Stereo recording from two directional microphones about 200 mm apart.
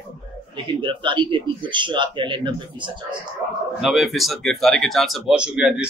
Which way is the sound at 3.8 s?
Centre (ahead or behind).